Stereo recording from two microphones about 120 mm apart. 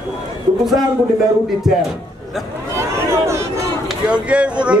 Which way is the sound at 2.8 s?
25° right (ahead or behind).